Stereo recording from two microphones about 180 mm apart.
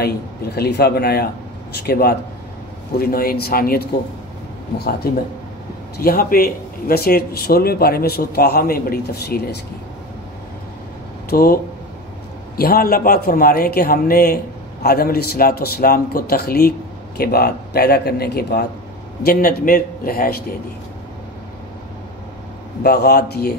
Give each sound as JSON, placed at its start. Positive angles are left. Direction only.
{"t": 0.6, "sound": "a man's voice", "side_deg": 65}
{"t": 5.1, "sound": "a man's voice", "side_deg": 60}
{"t": 11.2, "sound": "a man's voice", "side_deg": 55}
{"t": 22.8, "sound": "a man's voice", "side_deg": 60}